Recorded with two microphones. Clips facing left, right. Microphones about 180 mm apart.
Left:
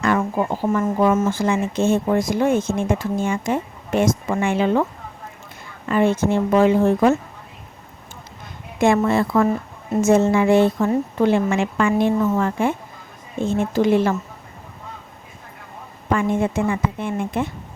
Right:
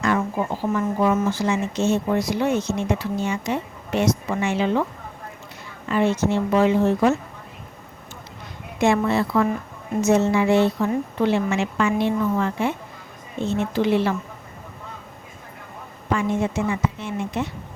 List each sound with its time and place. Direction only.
0.0 s a woman's voice: 55° left (ahead or behind)
5.9 s a woman's voice: 50° left (ahead or behind)
8.8 s a woman's voice: 50° left (ahead or behind)
16.0 s a woman's voice: 55° left (ahead or behind)